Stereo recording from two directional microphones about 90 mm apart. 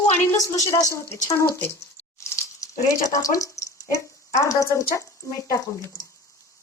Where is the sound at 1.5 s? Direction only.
25° left (ahead or behind).